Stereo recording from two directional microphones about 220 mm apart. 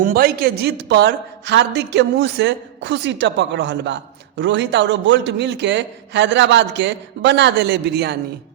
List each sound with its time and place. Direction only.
0.0 s a woman's voice: 40° right (ahead or behind)